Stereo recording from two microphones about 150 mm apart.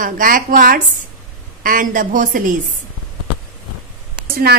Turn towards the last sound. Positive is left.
turn(degrees=-90)